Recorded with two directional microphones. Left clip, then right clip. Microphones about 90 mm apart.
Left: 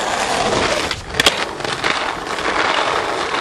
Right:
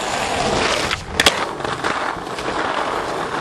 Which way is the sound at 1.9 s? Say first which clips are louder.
Left 4 dB; 50° left (ahead or behind).